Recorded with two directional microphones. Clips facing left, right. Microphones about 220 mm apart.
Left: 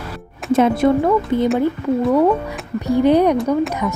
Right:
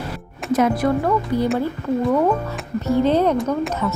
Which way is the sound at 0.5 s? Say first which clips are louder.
Left 4 dB; 25° left (ahead or behind).